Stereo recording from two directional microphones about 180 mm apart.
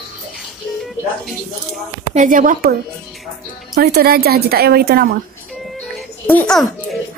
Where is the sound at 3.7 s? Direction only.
60° right (ahead or behind).